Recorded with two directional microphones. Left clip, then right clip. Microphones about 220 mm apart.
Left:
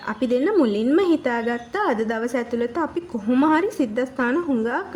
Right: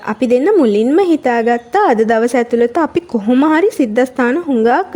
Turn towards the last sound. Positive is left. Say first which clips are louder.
# right 10 dB
turn(degrees=-35)  # may be behind; listen again after turning